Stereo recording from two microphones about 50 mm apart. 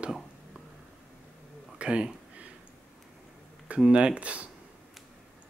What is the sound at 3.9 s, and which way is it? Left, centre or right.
Speech, right.